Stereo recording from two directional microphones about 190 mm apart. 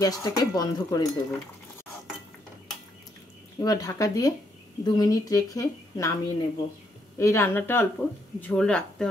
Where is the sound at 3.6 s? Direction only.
20° left (ahead or behind).